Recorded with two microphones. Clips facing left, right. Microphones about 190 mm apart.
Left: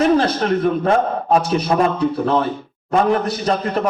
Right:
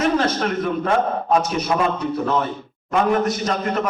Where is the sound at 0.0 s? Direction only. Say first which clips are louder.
Left 4 dB; 35° left (ahead or behind).